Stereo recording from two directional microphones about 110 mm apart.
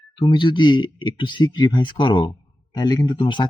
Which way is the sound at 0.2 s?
45° left (ahead or behind).